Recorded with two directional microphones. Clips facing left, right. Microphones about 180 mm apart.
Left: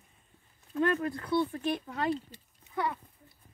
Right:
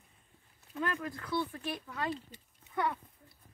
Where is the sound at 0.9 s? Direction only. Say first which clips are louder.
Left 6 dB; 35° left (ahead or behind).